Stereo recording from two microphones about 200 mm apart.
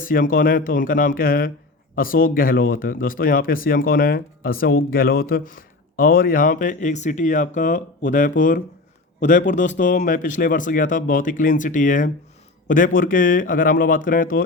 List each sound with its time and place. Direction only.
0.0 s speech: 45° left (ahead or behind)